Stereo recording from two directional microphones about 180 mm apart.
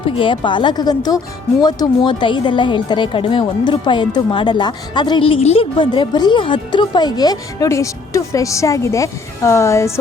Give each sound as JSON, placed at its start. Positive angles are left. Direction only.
{"t": 0.2, "sound": "a woman's voice", "side_deg": 25}